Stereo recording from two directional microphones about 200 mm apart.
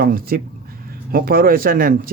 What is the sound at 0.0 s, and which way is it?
Speech, 50° right (ahead or behind).